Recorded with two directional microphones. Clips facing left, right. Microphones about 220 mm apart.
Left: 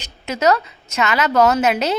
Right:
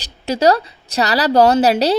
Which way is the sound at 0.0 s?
30° right (ahead or behind).